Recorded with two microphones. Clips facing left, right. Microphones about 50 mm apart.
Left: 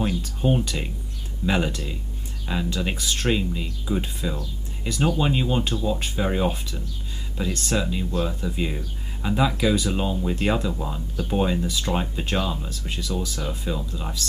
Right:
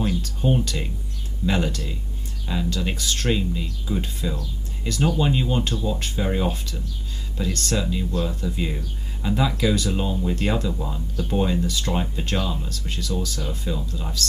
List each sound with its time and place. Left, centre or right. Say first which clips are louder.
0.0 s speech: even; centre
8.6 s speech: even; centre